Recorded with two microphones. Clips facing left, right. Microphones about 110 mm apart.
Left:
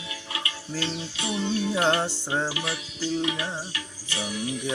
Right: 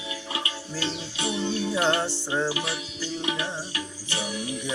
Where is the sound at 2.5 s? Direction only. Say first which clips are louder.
Right 2 dB; 25° right (ahead or behind).